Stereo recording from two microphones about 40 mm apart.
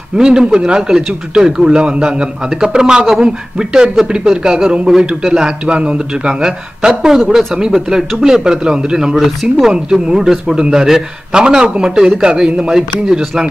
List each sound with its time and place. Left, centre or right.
0.2 s a man's voice: centre
9.1 s a man's voice: centre